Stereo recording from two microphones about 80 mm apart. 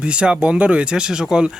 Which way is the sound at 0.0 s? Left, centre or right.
Centre.